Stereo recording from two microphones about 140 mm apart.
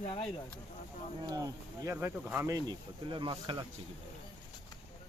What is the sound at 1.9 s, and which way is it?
Speech, 15° right (ahead or behind).